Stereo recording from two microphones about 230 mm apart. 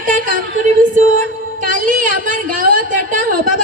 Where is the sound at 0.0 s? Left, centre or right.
Right.